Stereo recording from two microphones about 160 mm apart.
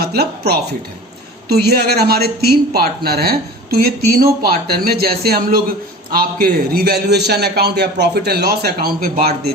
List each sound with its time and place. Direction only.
0.0 s a woman's voice: 85° right; by 9.5 s 70° right (ahead or behind)